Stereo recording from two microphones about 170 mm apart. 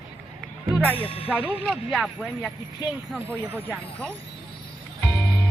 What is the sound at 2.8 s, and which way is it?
Speech, 25° left (ahead or behind).